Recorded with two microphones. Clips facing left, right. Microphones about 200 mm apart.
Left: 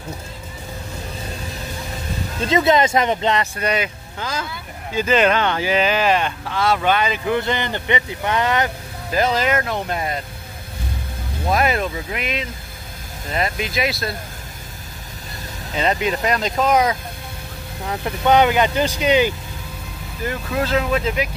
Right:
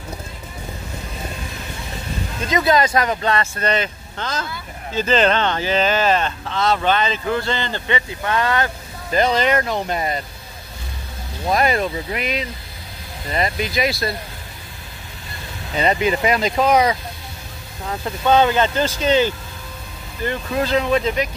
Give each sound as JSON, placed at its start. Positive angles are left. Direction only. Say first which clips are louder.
{"t": 2.4, "sound": "speech", "louder": "left 2 dB", "side_deg": 25}
{"t": 9.1, "sound": "speech", "louder": "right 2 dB", "side_deg": 5}
{"t": 11.4, "sound": "speech", "louder": "right 1 dB", "side_deg": 0}
{"t": 15.7, "sound": "speech", "louder": "right 2 dB", "side_deg": 0}
{"t": 18.0, "sound": "speech", "louder": "even", "side_deg": 15}
{"t": 20.2, "sound": "speech", "louder": "right 1 dB", "side_deg": 0}